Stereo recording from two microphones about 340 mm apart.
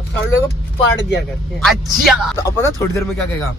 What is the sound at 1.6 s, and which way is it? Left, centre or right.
A man's voice, centre.